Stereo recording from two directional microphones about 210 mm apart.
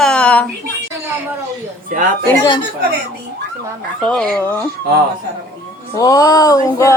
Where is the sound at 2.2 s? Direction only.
15° left (ahead or behind).